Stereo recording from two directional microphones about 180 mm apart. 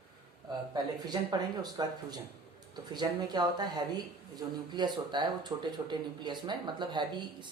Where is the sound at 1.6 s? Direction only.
25° right (ahead or behind).